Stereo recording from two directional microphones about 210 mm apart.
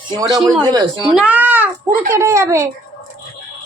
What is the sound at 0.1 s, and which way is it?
Speech, 15° right (ahead or behind).